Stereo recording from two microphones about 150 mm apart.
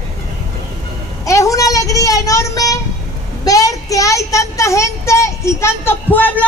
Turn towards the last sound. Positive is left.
turn(degrees=10)  # may be behind; listen again after turning